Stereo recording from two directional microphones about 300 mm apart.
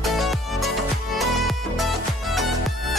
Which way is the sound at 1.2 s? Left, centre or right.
Centre.